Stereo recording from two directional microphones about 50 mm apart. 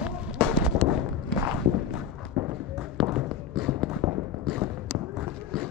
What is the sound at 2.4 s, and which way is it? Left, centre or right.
Run, right.